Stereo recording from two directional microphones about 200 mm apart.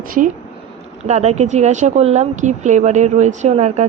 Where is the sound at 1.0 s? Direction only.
35° right (ahead or behind).